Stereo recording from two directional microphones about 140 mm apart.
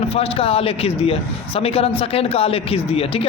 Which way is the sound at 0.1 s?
45° left (ahead or behind).